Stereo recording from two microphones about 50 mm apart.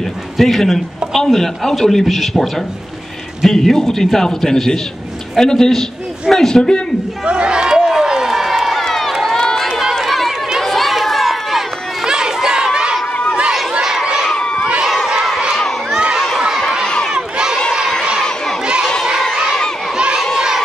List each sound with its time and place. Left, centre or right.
0.4 s a man's voice: centre
7.2 s speech: centre
7.9 s crowd: centre
9.1 s run: centre
12.1 s crowd: centre
14.3 s crowd: centre
15.0 s a sound: centre
15.9 s crowd: centre
16.3 s a sound: centre
16.8 s crowd: centre
17.1 s crowd: centre
20.3 s a sound: centre